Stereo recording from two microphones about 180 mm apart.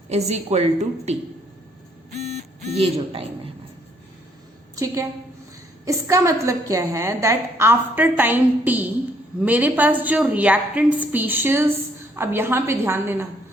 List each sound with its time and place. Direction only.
0.1 s a woman's voice: 40° right (ahead or behind)
2.6 s a woman's voice: 35° right (ahead or behind)
4.7 s a woman's voice: 15° right (ahead or behind)